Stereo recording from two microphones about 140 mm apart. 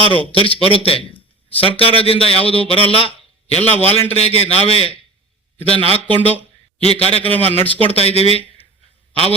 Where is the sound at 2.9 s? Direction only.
40° left (ahead or behind).